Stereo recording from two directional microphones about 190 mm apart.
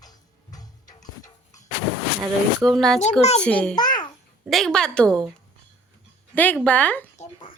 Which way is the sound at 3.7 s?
20° left (ahead or behind).